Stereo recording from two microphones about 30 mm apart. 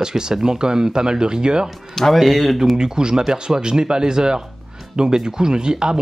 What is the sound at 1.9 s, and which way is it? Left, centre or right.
Speech, centre.